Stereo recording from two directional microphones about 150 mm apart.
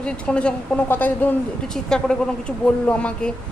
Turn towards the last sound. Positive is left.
turn(degrees=5)  # may be behind; listen again after turning